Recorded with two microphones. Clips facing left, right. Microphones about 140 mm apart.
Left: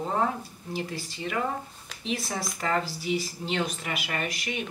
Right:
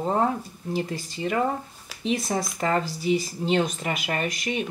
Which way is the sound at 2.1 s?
25° right (ahead or behind).